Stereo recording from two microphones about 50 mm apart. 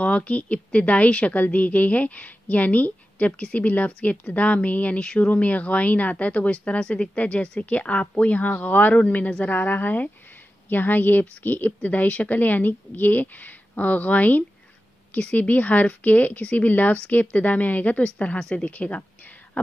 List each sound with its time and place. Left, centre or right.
0.0 s a woman's voice: left
18.4 s a woman's voice: centre
18.7 s a woman's voice: left
19.6 s a sound: left